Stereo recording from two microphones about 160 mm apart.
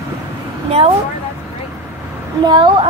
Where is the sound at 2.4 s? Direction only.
30° right (ahead or behind).